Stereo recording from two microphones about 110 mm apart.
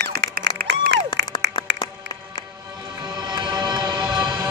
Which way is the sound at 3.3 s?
45° right (ahead or behind).